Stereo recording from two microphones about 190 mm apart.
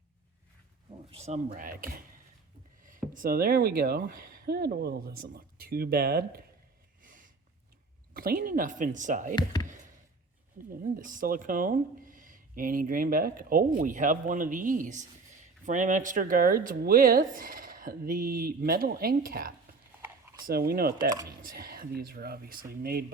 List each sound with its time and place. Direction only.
1.1 s speech: 35° right (ahead or behind); by 6.4 s 55° right (ahead or behind)
7.0 s snort: 45° right (ahead or behind)
8.1 s speech: 50° right (ahead or behind)
9.3 s speech: 20° left (ahead or behind)
10.8 s speech: 45° right (ahead or behind)